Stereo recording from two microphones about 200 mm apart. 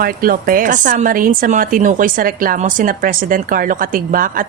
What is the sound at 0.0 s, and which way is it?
A woman's voice, 45° right (ahead or behind).